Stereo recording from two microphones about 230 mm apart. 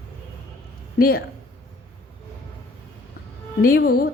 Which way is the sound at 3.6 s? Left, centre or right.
Left.